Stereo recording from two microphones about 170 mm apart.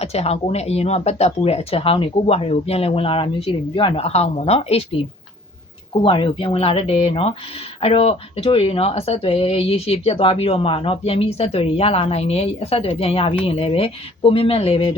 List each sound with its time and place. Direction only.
0.0 s a woman's voice: 35° left (ahead or behind)
6.0 s a woman's voice: 30° left (ahead or behind)